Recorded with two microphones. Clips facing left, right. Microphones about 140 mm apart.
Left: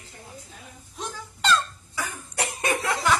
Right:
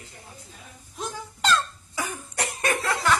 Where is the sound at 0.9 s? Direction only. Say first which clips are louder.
Right 2 dB; centre (ahead or behind).